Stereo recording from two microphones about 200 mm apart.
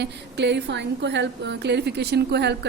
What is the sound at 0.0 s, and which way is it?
A woman's voice, 60° right (ahead or behind).